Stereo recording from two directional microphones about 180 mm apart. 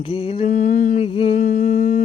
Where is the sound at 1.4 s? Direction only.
45° left (ahead or behind).